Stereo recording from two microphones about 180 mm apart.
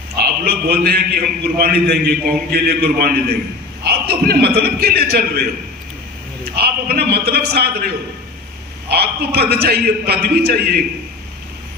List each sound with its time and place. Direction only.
0.4 s a man's voice: 60° right (ahead or behind)